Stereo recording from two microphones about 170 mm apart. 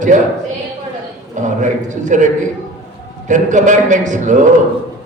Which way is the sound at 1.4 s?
45° right (ahead or behind).